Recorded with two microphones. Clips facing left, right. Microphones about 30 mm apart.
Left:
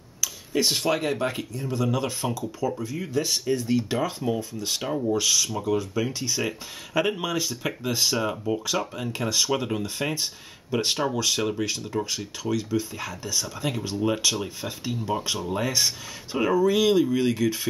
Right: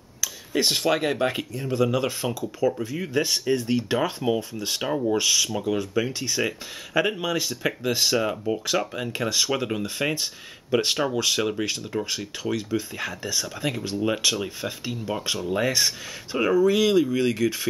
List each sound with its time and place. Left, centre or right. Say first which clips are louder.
0.6 s speech: right 1 dB; centre
3.1 s speech: right 2 dB; right
5.2 s speech: right 1 dB; right; by 7.3 s centre
7.3 s speech: right 2 dB; centre